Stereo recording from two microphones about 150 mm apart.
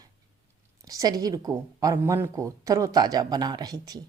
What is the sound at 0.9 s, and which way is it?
A woman's voice, 25° right (ahead or behind).